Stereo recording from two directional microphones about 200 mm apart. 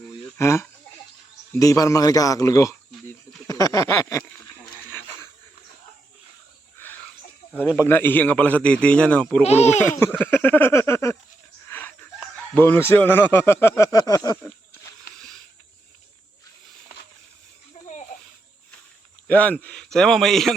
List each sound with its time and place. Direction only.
0.3 s speech: 15° left (ahead or behind)
3.4 s a sound: 15° left (ahead or behind)
6.8 s a sound: 10° left (ahead or behind)
7.8 s speech: 10° left (ahead or behind)
9.4 s speech: 35° left (ahead or behind)
10.0 s speech: 10° left (ahead or behind)
11.7 s wheeze: 10° left (ahead or behind)
12.5 s speech: 10° left (ahead or behind)
19.3 s a man's voice: 5° left (ahead or behind)